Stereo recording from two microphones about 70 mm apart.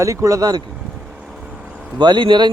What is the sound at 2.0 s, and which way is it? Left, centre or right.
Speech, right.